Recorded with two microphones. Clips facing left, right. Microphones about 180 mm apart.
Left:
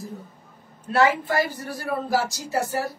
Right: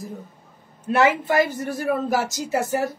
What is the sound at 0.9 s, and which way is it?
Speech, 20° right (ahead or behind).